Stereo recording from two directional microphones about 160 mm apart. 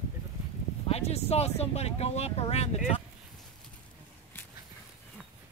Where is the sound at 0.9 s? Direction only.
40° left (ahead or behind).